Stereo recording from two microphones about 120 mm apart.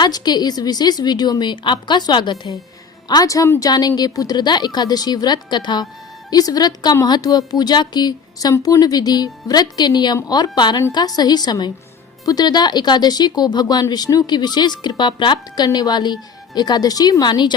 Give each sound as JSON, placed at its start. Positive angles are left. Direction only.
{"t": 0.0, "sound": "speech", "side_deg": 35}